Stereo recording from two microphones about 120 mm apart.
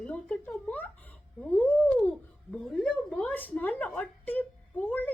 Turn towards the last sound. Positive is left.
turn(degrees=10)  # may be behind; listen again after turning